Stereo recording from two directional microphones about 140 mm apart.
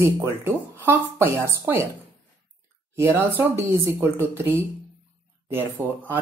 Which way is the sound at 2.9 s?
20° right (ahead or behind).